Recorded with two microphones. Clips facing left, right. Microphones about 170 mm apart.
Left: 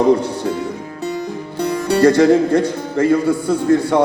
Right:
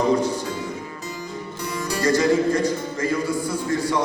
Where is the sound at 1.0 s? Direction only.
65° left (ahead or behind).